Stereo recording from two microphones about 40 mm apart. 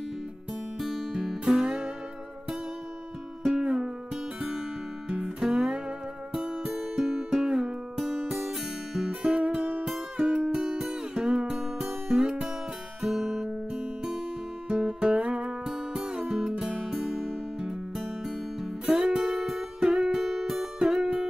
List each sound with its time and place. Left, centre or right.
0.7 s music: centre
3.4 s music: centre
5.4 s music: centre
6.8 s music: centre
9.4 s music: right
15.6 s music: centre